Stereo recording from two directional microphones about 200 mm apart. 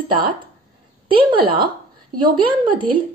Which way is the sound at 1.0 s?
25° right (ahead or behind).